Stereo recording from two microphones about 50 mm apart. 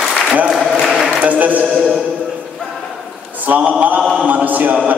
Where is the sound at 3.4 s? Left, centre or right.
Right.